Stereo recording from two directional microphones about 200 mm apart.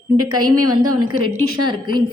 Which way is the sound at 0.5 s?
90° right.